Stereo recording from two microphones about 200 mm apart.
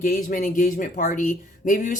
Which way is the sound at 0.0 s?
45° left (ahead or behind).